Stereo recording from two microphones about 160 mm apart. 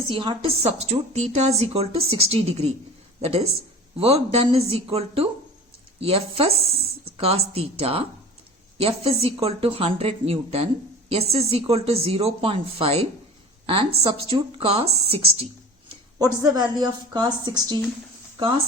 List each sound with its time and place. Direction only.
0.1 s a woman's voice: 30° right (ahead or behind)
16.4 s a woman's voice: 25° right (ahead or behind)